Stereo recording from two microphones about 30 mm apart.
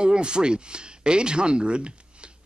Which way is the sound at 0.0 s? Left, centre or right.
Right.